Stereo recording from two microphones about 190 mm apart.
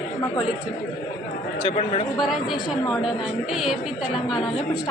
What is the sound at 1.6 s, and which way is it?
Speech, 30° left (ahead or behind).